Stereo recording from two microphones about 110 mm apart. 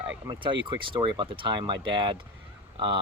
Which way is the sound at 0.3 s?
50° right (ahead or behind).